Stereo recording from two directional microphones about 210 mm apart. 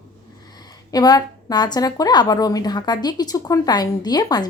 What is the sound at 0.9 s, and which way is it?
Speech, 20° left (ahead or behind).